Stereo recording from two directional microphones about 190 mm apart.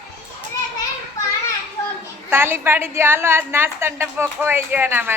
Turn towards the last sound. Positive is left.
turn(degrees=-10)  # may be behind; listen again after turning